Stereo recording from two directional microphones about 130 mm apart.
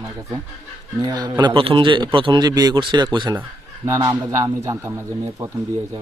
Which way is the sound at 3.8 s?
25° right (ahead or behind).